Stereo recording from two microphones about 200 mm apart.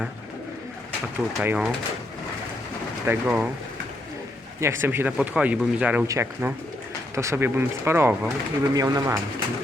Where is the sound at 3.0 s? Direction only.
5° right (ahead or behind).